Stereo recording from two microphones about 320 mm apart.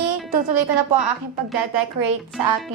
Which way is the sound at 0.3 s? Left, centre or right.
Right.